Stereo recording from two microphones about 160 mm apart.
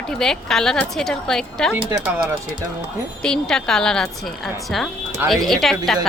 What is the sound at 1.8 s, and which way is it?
Speech, 15° right (ahead or behind).